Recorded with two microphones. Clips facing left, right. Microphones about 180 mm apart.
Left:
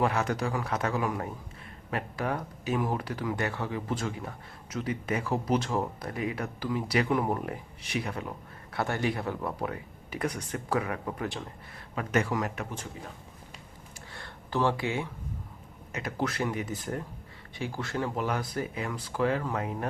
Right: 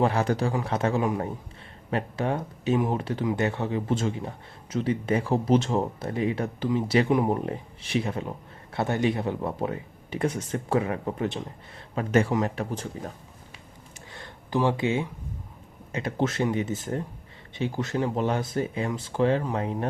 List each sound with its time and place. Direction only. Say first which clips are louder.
0.0 s a man's voice: right 4 dB; 30° right (ahead or behind)
14.1 s a sound: right 5 dB; 15° right (ahead or behind)
15.9 s speech: right 5 dB; 25° right (ahead or behind)